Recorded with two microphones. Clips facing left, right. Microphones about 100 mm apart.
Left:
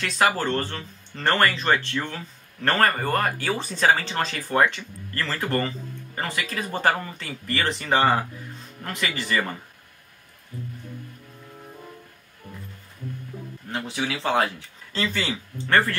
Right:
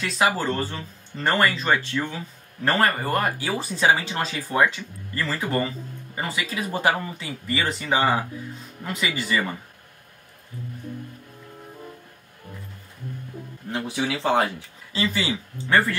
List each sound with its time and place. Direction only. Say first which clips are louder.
0.0 s speech: even; 5° right (ahead or behind)
13.7 s speech: right 2 dB; 10° right (ahead or behind)
14.9 s speech: right 2 dB; 5° right (ahead or behind)